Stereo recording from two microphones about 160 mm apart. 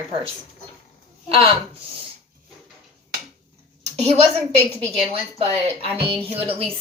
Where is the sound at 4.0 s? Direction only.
45° right (ahead or behind).